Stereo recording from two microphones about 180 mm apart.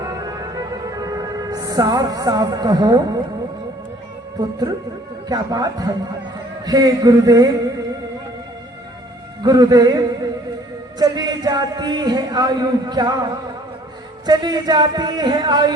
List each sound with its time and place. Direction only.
0.0 s music: 20° right (ahead or behind)
5.3 s speech: 20° right (ahead or behind)
9.4 s speech: 20° right (ahead or behind)